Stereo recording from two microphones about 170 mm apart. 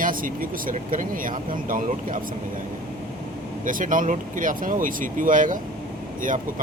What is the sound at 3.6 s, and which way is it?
Speech, 50° right (ahead or behind).